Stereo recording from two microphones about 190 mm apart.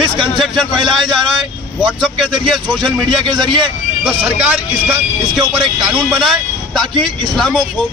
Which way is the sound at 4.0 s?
5° right (ahead or behind).